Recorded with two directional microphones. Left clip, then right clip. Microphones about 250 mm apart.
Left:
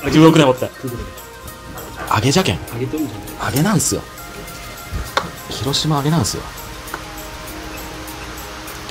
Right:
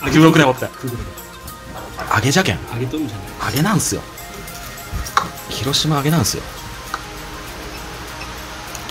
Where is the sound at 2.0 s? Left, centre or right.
Centre.